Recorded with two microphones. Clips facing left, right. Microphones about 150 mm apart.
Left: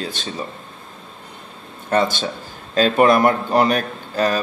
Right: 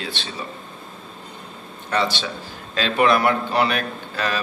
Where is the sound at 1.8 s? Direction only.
45° left (ahead or behind).